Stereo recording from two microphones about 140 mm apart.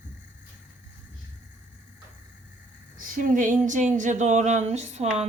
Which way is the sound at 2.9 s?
80° right.